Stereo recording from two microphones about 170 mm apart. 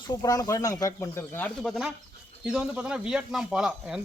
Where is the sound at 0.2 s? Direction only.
20° left (ahead or behind).